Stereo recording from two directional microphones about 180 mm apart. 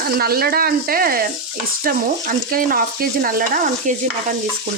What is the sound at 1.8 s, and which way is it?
Stir, 50° right (ahead or behind).